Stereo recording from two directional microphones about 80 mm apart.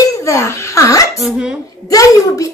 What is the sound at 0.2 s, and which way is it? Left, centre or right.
Speech, left.